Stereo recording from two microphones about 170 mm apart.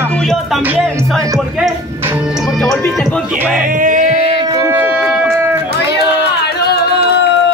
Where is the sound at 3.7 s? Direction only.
50° right (ahead or behind).